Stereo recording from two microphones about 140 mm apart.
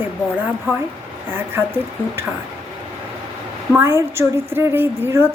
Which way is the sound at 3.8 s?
20° right (ahead or behind).